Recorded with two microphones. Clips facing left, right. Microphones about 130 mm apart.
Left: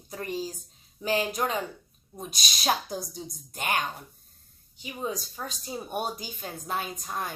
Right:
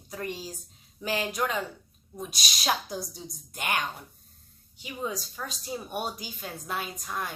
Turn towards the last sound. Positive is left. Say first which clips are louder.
# left 1 dB
turn(degrees=30)  # may be behind; listen again after turning